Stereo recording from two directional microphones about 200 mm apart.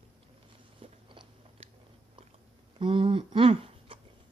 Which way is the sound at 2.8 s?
25° right (ahead or behind).